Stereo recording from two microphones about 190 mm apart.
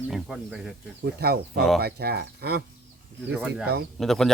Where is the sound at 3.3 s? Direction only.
5° right (ahead or behind).